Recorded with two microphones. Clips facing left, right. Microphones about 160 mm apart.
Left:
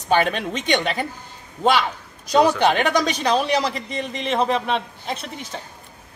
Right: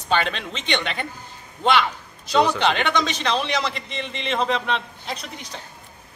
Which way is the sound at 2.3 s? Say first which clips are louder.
Left 3 dB; 10° left (ahead or behind).